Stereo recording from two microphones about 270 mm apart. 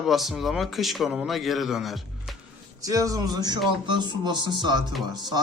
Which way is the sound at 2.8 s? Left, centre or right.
Centre.